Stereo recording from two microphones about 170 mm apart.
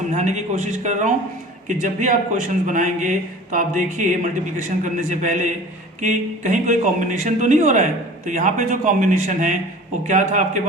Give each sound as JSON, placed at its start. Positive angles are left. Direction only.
{"t": 0.1, "sound": "a man's voice", "side_deg": -45}